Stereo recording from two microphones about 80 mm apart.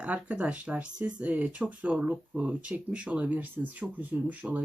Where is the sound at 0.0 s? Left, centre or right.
Centre.